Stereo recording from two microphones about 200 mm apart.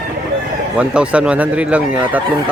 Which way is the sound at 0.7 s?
5° right (ahead or behind).